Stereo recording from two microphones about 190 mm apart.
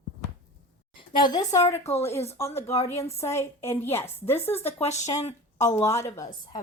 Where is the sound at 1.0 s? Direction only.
20° left (ahead or behind).